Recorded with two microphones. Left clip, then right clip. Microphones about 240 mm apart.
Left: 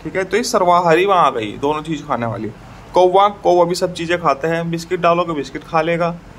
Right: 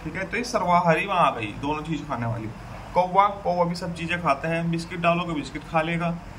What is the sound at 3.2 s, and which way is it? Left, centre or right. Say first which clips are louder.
Speech: left 10 dB; left.